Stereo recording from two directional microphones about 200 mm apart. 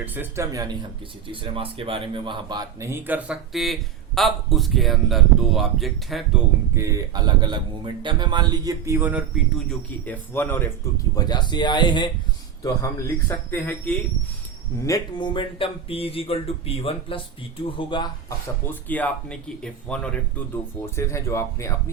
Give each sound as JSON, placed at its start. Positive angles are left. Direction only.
{"t": 0.0, "sound": "speech", "side_deg": -10}
{"t": 6.7, "sound": "speech", "side_deg": -15}
{"t": 9.6, "sound": "speech", "side_deg": 10}
{"t": 18.6, "sound": "speech", "side_deg": 10}